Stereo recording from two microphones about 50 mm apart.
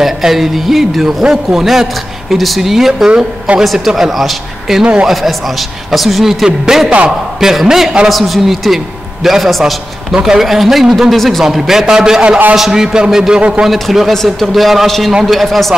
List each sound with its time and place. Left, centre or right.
0.0 s a man's voice: centre
3.1 s speech: centre
3.6 s speech: centre
6.4 s a man's voice: centre